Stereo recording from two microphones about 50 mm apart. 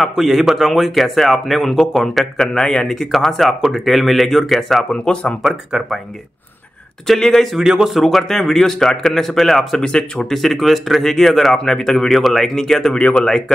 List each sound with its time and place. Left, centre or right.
0.0 s speech: centre
5.0 s speech: left
5.4 s speech: centre
7.1 s speech: centre
7.5 s speech: centre
8.0 s speech: centre
10.3 s speech: centre